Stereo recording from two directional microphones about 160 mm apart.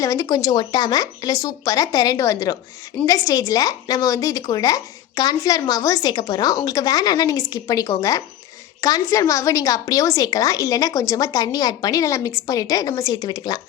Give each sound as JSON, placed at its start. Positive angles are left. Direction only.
{"t": 0.0, "sound": "a woman's voice", "side_deg": 20}